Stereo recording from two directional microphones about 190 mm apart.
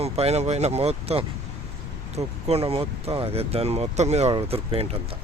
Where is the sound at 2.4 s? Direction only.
30° right (ahead or behind).